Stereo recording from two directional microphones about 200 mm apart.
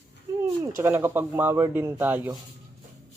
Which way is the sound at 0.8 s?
10° right (ahead or behind).